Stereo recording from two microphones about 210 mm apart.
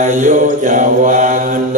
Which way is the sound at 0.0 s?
35° right (ahead or behind).